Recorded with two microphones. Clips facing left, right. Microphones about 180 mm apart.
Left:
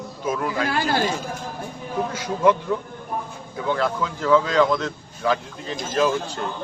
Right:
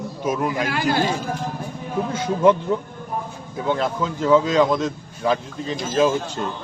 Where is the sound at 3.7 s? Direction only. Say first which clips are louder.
Right 1 dB; 20° right (ahead or behind).